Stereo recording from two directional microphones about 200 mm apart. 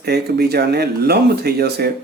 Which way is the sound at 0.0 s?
55° right (ahead or behind).